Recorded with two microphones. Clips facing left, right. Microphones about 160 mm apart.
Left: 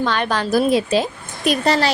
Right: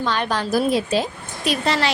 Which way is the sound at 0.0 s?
70° left (ahead or behind).